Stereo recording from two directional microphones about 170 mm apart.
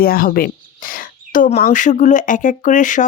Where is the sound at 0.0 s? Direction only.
60° left (ahead or behind).